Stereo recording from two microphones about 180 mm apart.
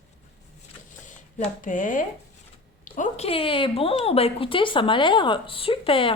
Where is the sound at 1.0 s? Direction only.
45° left (ahead or behind).